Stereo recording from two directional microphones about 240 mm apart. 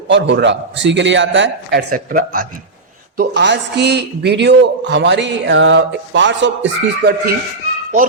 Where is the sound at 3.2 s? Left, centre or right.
Right.